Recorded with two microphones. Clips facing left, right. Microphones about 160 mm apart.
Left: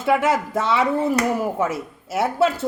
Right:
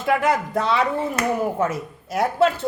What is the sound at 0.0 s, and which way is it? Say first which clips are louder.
Speech: left 1 dB; 5° left (ahead or behind).